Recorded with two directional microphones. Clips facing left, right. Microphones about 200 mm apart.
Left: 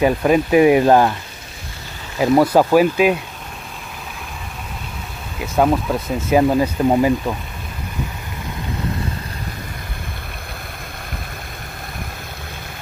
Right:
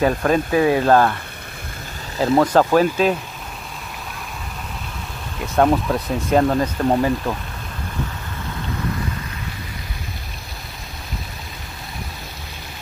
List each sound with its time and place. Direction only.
0.0 s speech: 15° left (ahead or behind)
2.1 s speech: 10° left (ahead or behind)
5.4 s speech: 5° left (ahead or behind)